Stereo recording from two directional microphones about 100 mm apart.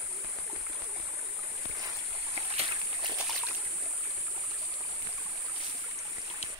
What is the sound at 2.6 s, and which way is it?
Walk, 50° right (ahead or behind).